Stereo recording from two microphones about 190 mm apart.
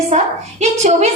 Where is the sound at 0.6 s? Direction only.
35° right (ahead or behind).